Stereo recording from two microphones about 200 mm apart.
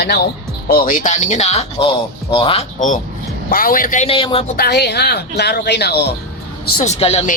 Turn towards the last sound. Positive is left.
turn(degrees=30)  # may be behind; listen again after turning